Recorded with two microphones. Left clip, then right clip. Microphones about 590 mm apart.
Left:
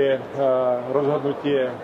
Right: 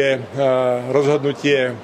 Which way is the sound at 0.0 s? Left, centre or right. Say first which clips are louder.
Right 3 dB; right.